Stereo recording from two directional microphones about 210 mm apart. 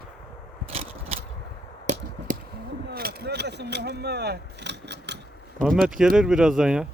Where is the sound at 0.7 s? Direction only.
30° right (ahead or behind); by 5.2 s 55° right (ahead or behind).